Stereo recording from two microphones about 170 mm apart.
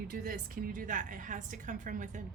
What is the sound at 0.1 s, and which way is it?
Speech, 55° right (ahead or behind).